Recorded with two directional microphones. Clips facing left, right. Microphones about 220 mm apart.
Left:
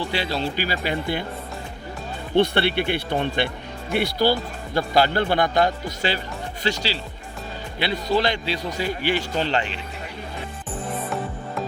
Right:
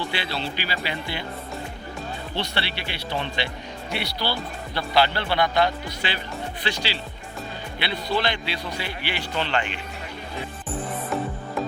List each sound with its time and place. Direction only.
0.1 s speech: 40° left (ahead or behind)
2.3 s speech: 55° left (ahead or behind); by 9.7 s 35° left (ahead or behind)